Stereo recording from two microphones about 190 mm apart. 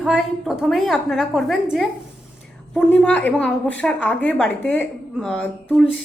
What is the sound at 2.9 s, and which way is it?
A woman's voice, 5° left (ahead or behind).